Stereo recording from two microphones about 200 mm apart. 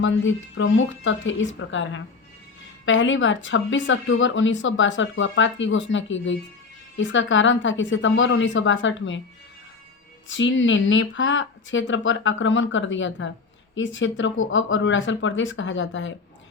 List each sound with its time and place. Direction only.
0.0 s speech: 70° left (ahead or behind)
10.2 s speech: 70° left (ahead or behind)